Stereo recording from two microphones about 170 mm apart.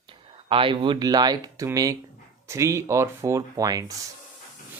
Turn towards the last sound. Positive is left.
turn(degrees=-20)  # may be behind; listen again after turning